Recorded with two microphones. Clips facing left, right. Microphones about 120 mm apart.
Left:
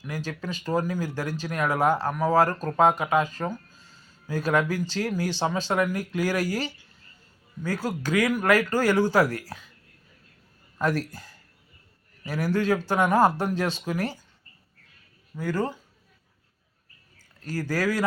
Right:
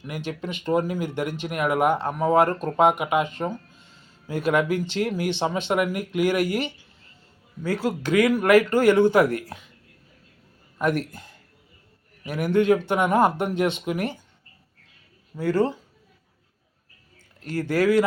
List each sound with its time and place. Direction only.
0.0 s speech: 20° right (ahead or behind)
10.9 s speech: 20° right (ahead or behind)
15.4 s speech: 30° right (ahead or behind)
17.2 s speech: 25° right (ahead or behind)